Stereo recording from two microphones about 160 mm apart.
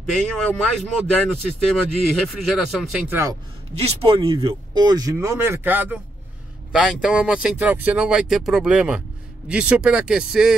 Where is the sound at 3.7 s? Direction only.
40° right (ahead or behind).